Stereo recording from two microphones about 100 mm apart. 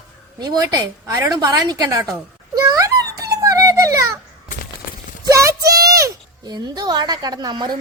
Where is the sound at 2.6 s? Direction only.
30° right (ahead or behind).